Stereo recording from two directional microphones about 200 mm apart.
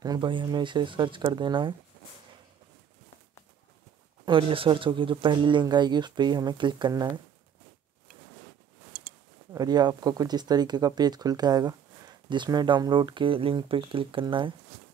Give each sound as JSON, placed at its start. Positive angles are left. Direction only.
{"t": 0.0, "sound": "speech", "side_deg": -20}
{"t": 4.3, "sound": "speech", "side_deg": -25}
{"t": 9.5, "sound": "speech", "side_deg": -20}